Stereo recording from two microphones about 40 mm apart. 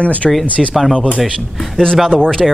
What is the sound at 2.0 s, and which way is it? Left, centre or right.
Speech, centre.